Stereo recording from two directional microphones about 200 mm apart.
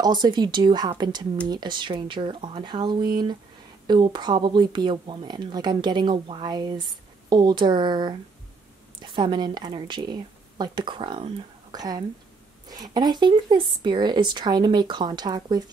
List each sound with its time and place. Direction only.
0.0 s speech: 20° right (ahead or behind)